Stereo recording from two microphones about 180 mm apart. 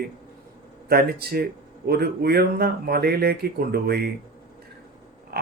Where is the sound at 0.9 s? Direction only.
60° right (ahead or behind).